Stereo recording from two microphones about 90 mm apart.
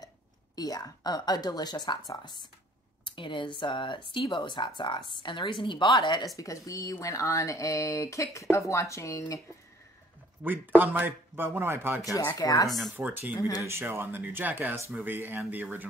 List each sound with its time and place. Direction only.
0.6 s a woman's voice: 45° left (ahead or behind); by 5.9 s 65° left (ahead or behind)
5.9 s a woman's voice: 50° left (ahead or behind)
6.3 s speech: 40° left (ahead or behind)
10.4 s speech: 20° right (ahead or behind)
12.0 s a woman's voice: 40° left (ahead or behind)
12.9 s speech: 20° right (ahead or behind)
13.4 s speech: 40° left (ahead or behind)
13.7 s speech: 30° right (ahead or behind)